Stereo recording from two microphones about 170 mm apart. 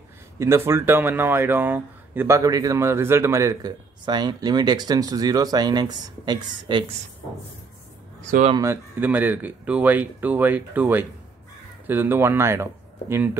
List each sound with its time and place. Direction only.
0.4 s speech: 15° right (ahead or behind)
8.3 s speech: 45° right (ahead or behind)
8.5 s speech: 15° right (ahead or behind)